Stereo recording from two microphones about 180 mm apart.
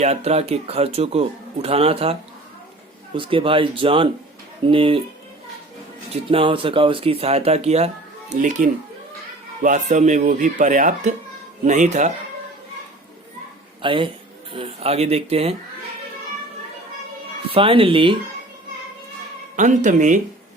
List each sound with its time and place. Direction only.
0.0 s speech: 35° right (ahead or behind)
3.2 s speech: 30° right (ahead or behind)
6.3 s speech: 30° right (ahead or behind)
13.8 s speech: 30° right (ahead or behind)
17.5 s speech: 30° right (ahead or behind)
19.5 s speech: 45° right (ahead or behind)